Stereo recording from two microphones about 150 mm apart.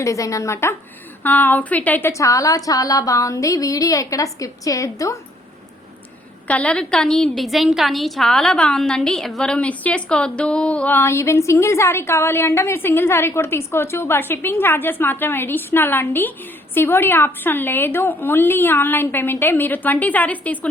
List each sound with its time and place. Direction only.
0.0 s a woman's voice: 20° left (ahead or behind)
6.5 s a woman's voice: 10° left (ahead or behind)